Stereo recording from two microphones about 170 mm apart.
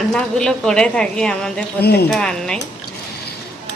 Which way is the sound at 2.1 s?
5° left (ahead or behind).